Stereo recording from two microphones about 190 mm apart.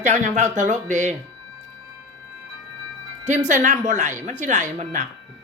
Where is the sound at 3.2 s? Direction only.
40° right (ahead or behind).